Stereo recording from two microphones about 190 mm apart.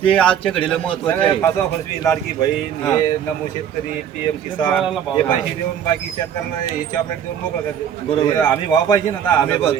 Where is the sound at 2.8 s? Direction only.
15° left (ahead or behind).